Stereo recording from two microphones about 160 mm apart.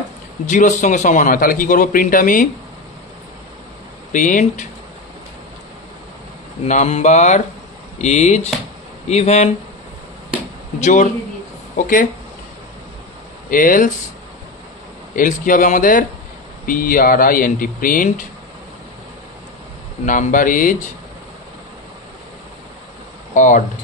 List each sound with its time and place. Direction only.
0.5 s a man's voice: 50° left (ahead or behind)
4.1 s speech: 55° left (ahead or behind)
6.6 s speech: 45° left (ahead or behind)
10.8 s speech: 50° left (ahead or behind)
13.5 s a man's voice: 60° left (ahead or behind)
15.1 s a man's voice: 55° left (ahead or behind)
20.1 s a man's voice: 55° left (ahead or behind)
23.3 s speech: 50° left (ahead or behind)